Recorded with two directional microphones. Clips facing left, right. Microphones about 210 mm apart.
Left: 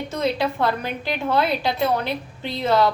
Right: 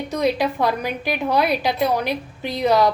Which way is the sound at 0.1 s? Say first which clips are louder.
Right 3 dB; 15° right (ahead or behind).